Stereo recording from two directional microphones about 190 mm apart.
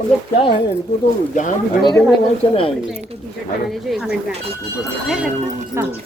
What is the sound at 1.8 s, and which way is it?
Speech, 20° left (ahead or behind).